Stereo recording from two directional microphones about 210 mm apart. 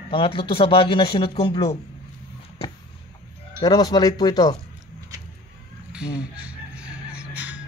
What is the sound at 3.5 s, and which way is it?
Speech, 20° left (ahead or behind).